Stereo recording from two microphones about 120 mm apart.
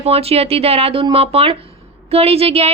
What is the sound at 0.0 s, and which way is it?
Speech, 55° right (ahead or behind).